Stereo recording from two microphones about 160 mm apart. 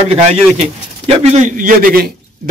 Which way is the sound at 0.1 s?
40° right (ahead or behind).